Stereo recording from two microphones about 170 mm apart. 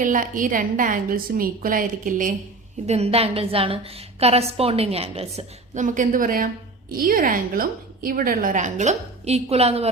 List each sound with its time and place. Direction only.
0.0 s a woman's voice: 50° right (ahead or behind)
2.8 s a woman's voice: 40° right (ahead or behind)